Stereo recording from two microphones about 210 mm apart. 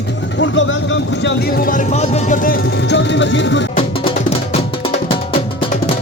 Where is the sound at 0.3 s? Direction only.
60° left (ahead or behind).